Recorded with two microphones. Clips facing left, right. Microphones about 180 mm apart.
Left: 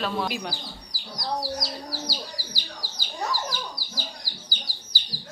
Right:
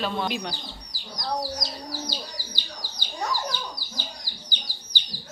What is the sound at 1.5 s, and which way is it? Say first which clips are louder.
Speech: left 1 dB; 20° right (ahead or behind).